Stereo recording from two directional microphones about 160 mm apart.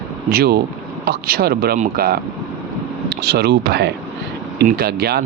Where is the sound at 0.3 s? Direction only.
75° right (ahead or behind).